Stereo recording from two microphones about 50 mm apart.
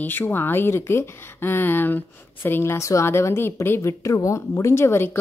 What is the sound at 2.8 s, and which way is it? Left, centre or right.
Speech, left.